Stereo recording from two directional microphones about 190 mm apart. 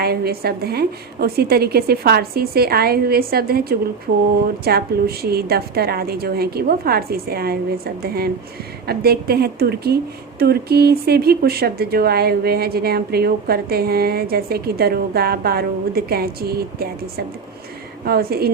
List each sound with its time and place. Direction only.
0.0 s a woman's voice: 55° right (ahead or behind)